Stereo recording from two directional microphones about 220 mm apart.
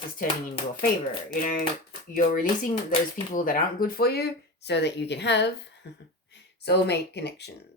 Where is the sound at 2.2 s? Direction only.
35° left (ahead or behind).